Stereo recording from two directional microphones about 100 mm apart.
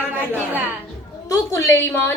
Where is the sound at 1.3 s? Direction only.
30° left (ahead or behind).